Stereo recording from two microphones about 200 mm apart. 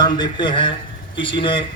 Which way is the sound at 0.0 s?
20° left (ahead or behind).